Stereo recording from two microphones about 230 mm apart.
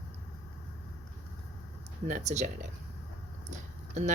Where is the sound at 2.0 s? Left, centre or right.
Right.